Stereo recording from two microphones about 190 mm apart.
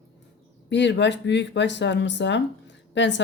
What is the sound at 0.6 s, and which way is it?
Speech, 65° left (ahead or behind).